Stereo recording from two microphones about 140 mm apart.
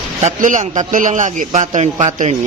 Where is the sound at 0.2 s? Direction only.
60° right (ahead or behind).